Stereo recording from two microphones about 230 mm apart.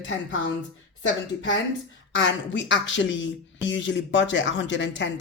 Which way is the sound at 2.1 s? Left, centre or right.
Left.